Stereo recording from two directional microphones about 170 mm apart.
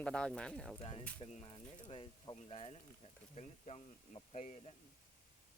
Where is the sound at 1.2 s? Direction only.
30° left (ahead or behind).